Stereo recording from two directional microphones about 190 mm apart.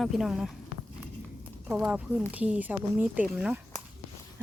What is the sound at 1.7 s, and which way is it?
Speech, 5° right (ahead or behind).